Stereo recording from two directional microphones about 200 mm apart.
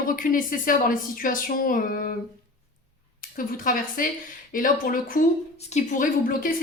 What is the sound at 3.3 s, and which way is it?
A woman's voice, 45° left (ahead or behind).